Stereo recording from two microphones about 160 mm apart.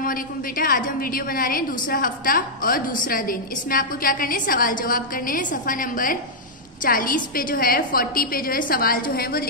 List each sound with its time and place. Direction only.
0.0 s a woman's voice: 60° left (ahead or behind)